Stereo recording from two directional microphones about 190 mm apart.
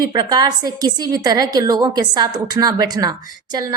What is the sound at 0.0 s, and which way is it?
A woman's voice, 20° right (ahead or behind).